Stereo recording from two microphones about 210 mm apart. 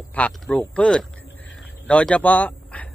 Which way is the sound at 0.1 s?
5° left (ahead or behind).